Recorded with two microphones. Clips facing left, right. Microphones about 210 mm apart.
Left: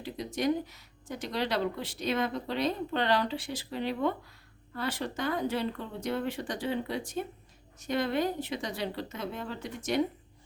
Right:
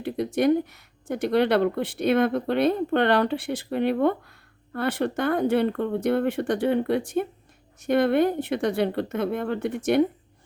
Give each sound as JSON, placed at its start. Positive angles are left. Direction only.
{"t": 0.0, "sound": "speech", "side_deg": -60}